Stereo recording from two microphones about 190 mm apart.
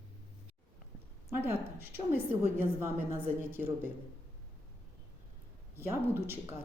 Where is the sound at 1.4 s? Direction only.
10° right (ahead or behind).